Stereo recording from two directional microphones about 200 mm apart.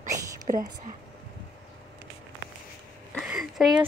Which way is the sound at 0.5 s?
40° right (ahead or behind).